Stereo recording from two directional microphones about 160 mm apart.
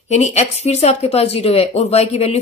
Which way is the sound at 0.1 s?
45° left (ahead or behind).